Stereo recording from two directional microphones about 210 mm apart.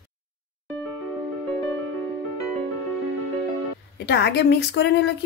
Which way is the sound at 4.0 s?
55° left (ahead or behind).